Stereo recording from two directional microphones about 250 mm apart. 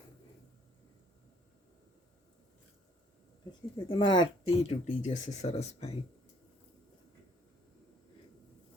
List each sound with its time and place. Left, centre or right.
3.8 s speech: centre